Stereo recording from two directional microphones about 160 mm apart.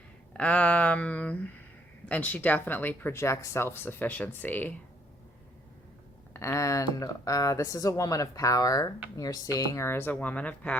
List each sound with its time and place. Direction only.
0.3 s speech: 10° left (ahead or behind)
6.3 s speech: 20° left (ahead or behind)